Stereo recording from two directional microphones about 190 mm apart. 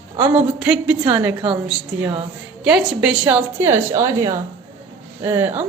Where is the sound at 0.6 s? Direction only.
5° right (ahead or behind).